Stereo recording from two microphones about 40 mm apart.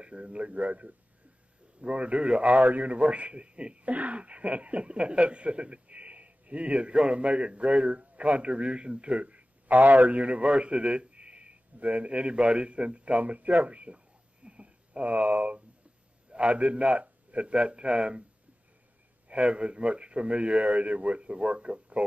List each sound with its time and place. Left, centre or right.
0.0 s a man's voice: right
16.3 s a man's voice: right
19.2 s speech: right